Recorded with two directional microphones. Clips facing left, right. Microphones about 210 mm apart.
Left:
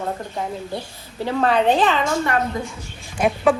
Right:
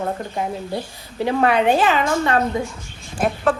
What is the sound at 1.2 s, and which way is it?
Speech, 15° right (ahead or behind).